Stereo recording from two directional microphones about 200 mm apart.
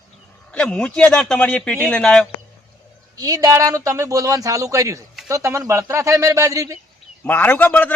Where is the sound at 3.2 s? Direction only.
20° right (ahead or behind).